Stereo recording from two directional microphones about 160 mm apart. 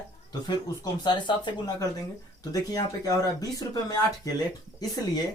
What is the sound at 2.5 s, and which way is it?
Speech, 20° left (ahead or behind).